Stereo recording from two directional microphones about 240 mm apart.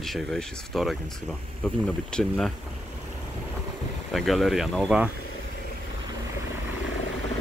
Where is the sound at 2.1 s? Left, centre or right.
Centre.